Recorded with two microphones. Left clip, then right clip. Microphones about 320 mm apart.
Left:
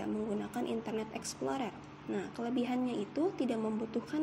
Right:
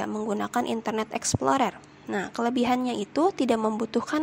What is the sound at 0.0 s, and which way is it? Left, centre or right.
A woman's voice, right.